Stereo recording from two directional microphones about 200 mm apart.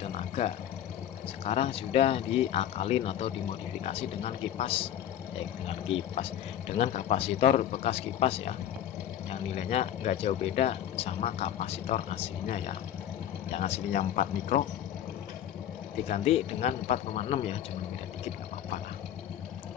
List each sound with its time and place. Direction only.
0.0 s a sound: 35° left (ahead or behind)
1.4 s speech: 30° left (ahead or behind)
16.1 s speech: 30° left (ahead or behind)